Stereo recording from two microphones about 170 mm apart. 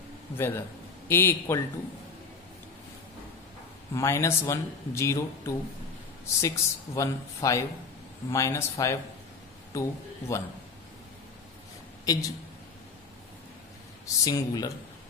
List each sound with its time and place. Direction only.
0.4 s a man's voice: 15° left (ahead or behind)
3.9 s speech: 15° left (ahead or behind)
12.0 s a woman's voice: 20° left (ahead or behind)
14.0 s speech: 20° left (ahead or behind)